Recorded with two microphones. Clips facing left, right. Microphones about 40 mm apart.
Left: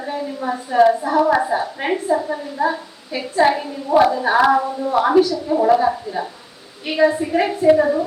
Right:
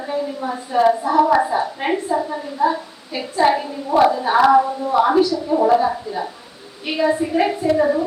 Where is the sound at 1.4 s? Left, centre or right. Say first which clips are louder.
Right 1 dB; centre.